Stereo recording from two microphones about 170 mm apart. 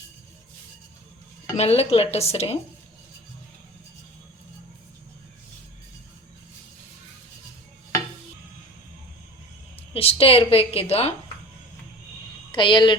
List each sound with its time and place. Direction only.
1.5 s a woman's voice: 35° left (ahead or behind)
9.9 s a woman's voice: 35° left (ahead or behind)
12.5 s speech: 30° left (ahead or behind)